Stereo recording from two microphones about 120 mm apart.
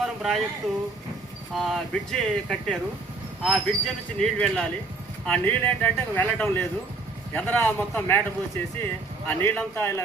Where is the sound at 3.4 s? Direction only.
5° right (ahead or behind).